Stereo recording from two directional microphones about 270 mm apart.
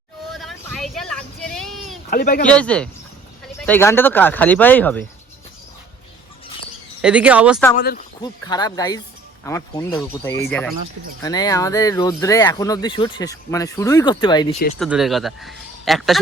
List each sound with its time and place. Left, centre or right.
0.3 s vehicle: centre
2.0 s speech: left
2.5 s speech: centre
7.0 s speech: centre
7.8 s speech: left
8.2 s speech: centre
14.8 s speech: centre